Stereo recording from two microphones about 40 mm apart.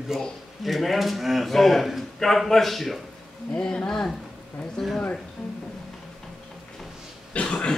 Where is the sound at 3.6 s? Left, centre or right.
Centre.